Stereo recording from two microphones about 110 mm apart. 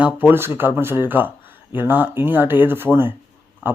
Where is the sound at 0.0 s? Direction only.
15° right (ahead or behind).